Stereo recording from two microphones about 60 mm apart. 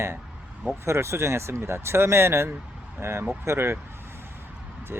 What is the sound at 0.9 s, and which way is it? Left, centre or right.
Speech, right.